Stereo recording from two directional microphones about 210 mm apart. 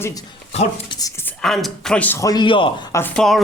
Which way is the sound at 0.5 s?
30° left (ahead or behind).